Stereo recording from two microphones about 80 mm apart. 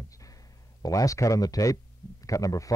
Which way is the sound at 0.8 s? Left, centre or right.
Left.